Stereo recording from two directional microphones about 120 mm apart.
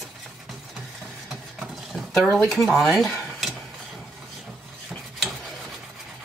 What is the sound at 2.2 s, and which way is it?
Speech, 5° left (ahead or behind).